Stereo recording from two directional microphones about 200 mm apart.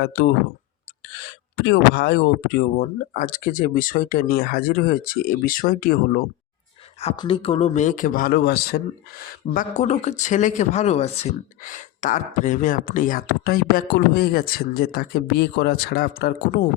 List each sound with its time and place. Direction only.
0.0 s speech: 50° left (ahead or behind)
1.5 s speech: 60° left (ahead or behind)
7.0 s speech: 25° left (ahead or behind); by 16.6 s 45° left (ahead or behind)